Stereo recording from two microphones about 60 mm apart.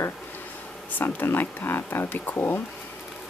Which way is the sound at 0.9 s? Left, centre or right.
Left.